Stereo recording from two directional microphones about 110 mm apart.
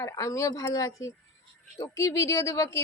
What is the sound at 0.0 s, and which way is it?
Speech, 30° left (ahead or behind).